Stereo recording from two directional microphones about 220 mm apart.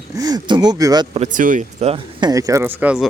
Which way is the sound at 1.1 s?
35° right (ahead or behind).